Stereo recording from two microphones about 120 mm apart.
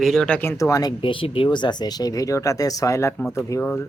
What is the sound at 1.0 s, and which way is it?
Speech, 45° left (ahead or behind).